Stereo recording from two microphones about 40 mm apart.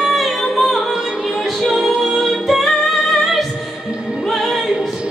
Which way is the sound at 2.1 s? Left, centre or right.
Centre.